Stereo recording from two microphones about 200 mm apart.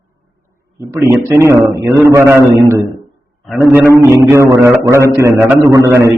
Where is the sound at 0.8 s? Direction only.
15° right (ahead or behind).